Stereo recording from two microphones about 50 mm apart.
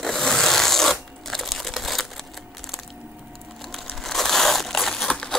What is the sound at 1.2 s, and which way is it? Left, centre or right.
Crumpling, centre.